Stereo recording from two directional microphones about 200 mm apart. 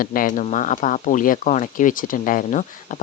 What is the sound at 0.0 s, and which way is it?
Speech, 45° left (ahead or behind).